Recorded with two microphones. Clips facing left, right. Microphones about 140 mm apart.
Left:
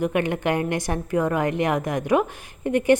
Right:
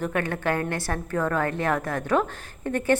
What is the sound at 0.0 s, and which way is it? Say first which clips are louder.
A woman's voice: left 4 dB; 15° left (ahead or behind).